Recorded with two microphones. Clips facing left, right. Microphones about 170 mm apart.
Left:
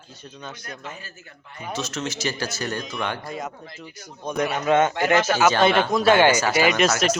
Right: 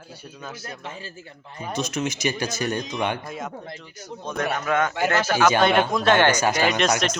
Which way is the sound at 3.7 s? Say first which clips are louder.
Right 3 dB; 10° left (ahead or behind).